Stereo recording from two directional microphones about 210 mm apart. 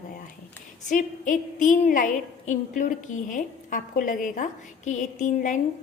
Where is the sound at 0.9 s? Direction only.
40° left (ahead or behind).